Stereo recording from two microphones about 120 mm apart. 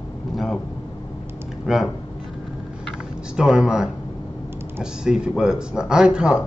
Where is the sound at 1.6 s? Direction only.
5° right (ahead or behind).